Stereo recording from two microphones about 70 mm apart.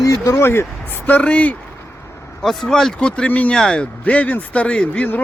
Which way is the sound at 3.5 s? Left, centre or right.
Centre.